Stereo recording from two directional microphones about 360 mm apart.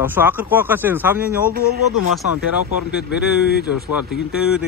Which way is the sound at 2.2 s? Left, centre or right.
Left.